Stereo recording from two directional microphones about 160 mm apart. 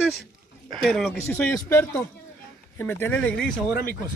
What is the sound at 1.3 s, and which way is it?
Speech, 15° left (ahead or behind).